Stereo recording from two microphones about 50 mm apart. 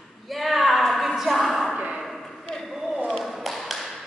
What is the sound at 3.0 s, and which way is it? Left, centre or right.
Tap, centre.